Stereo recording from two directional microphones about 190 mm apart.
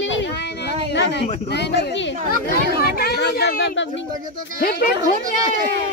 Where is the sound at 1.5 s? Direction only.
65° left (ahead or behind).